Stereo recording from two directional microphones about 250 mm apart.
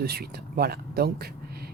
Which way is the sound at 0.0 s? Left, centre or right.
Right.